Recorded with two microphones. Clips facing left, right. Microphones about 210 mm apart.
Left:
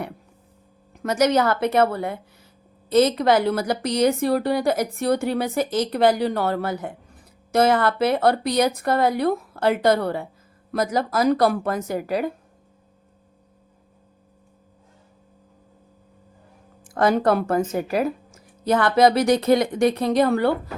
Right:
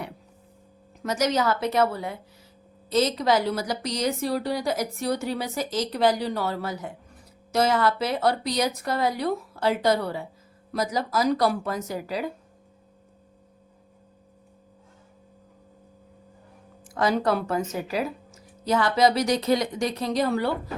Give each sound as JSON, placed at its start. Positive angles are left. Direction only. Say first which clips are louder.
{"t": 1.0, "sound": "a woman's voice", "louder": "left 5 dB", "side_deg": 55}
{"t": 16.8, "sound": "a woman's voice", "louder": "left 4 dB", "side_deg": 55}